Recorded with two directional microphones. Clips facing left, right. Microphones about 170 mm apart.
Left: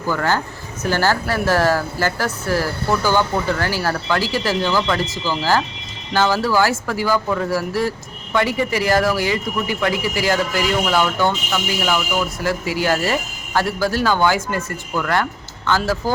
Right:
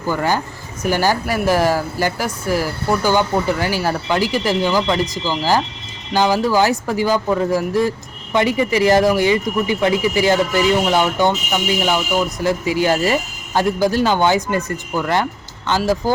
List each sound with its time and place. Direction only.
0.1 s speech: 15° right (ahead or behind)